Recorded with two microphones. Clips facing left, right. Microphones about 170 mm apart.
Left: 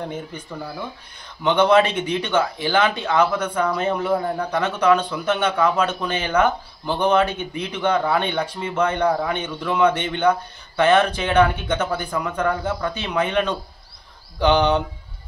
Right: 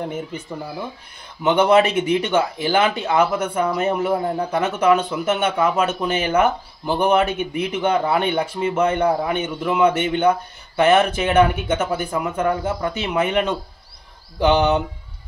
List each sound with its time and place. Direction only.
0.1 s speech: 10° right (ahead or behind)
4.2 s a man's voice: 25° right (ahead or behind)
4.6 s speech: 10° right (ahead or behind)